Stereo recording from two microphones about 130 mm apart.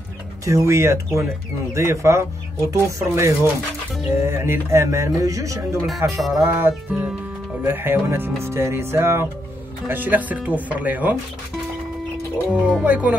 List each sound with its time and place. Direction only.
0.5 s speech: 20° right (ahead or behind)
12.5 s speech: 10° right (ahead or behind)